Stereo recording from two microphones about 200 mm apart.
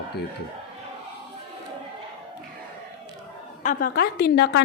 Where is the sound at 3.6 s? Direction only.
45° left (ahead or behind).